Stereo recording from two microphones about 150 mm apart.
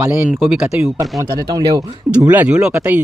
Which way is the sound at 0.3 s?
5° right (ahead or behind).